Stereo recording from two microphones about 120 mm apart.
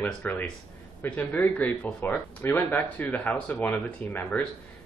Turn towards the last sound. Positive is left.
turn(degrees=15)  # may be behind; listen again after turning